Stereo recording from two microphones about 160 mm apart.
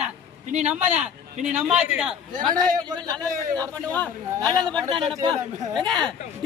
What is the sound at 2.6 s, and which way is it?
Speech, 25° right (ahead or behind).